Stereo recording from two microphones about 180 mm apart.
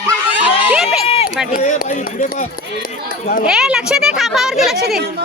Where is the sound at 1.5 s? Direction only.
45° left (ahead or behind).